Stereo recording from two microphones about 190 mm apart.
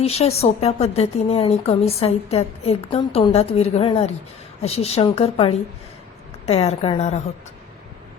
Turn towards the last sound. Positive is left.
turn(degrees=35)  # may be behind; listen again after turning